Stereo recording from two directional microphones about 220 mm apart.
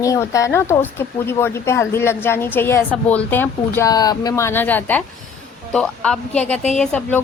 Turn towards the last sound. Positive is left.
turn(degrees=5)  # may be behind; listen again after turning